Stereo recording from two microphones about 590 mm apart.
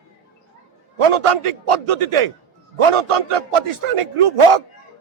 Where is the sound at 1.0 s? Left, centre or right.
Right.